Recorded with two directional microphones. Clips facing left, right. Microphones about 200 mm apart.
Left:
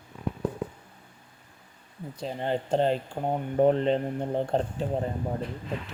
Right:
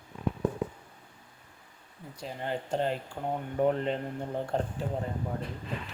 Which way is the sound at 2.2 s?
25° left (ahead or behind).